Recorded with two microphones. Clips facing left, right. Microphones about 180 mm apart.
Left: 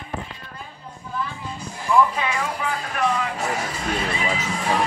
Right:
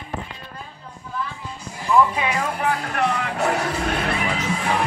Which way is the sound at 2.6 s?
65° right (ahead or behind).